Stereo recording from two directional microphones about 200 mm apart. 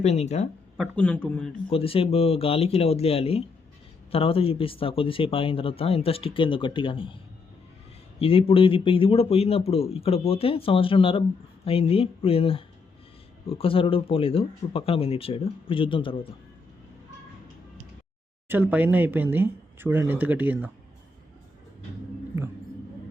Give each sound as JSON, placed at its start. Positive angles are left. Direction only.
{"t": 0.0, "sound": "speech", "side_deg": 35}
{"t": 0.8, "sound": "speech", "side_deg": 5}
{"t": 1.7, "sound": "speech", "side_deg": 30}
{"t": 8.2, "sound": "speech", "side_deg": 30}
{"t": 18.4, "sound": "speech", "side_deg": -10}